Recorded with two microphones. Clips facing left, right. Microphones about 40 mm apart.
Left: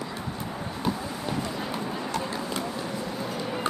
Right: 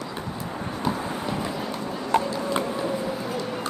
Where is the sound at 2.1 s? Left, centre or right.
Right.